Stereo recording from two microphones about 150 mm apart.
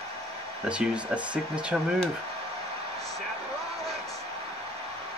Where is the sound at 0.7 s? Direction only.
5° right (ahead or behind).